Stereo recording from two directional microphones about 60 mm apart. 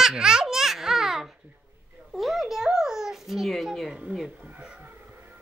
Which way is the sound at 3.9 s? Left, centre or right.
Centre.